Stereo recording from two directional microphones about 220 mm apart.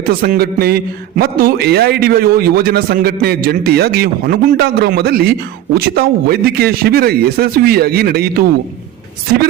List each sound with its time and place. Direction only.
0.0 s a man's voice: 40° right (ahead or behind)